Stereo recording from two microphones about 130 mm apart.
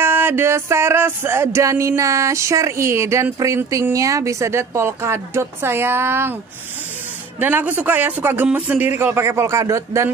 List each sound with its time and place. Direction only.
0.0 s music: 15° right (ahead or behind)
7.3 s speech: 15° right (ahead or behind)